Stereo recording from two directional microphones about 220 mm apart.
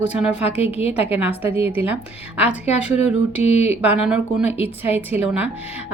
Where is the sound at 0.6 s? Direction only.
25° left (ahead or behind).